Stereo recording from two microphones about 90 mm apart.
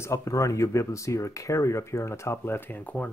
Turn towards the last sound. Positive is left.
turn(degrees=15)  # may be behind; listen again after turning